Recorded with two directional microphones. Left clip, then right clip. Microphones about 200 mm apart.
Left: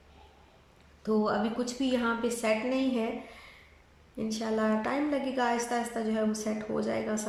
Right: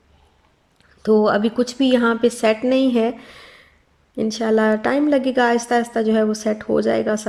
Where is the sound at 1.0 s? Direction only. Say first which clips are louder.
Right 13 dB; 45° right (ahead or behind).